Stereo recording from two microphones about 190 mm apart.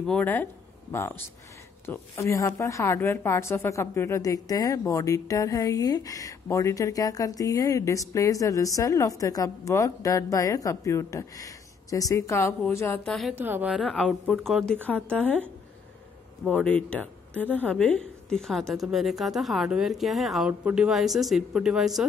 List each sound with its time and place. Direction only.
0.0 s speech: 5° left (ahead or behind)
13.3 s a woman's voice: 10° right (ahead or behind)